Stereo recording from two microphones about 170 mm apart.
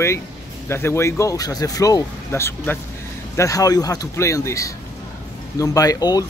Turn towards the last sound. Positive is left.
turn(degrees=20)  # may be behind; listen again after turning